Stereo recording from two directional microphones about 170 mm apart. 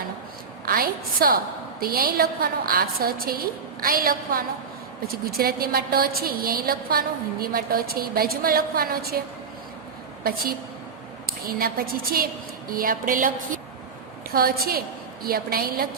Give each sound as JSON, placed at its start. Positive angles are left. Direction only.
{"t": 0.6, "sound": "a woman's voice", "side_deg": -60}
{"t": 11.3, "sound": "a woman's voice", "side_deg": -60}